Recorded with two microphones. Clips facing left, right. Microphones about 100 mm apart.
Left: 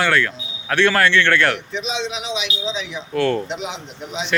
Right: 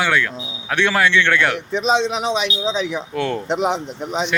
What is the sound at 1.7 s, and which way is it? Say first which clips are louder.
A man's voice: right 7 dB; 45° right (ahead or behind).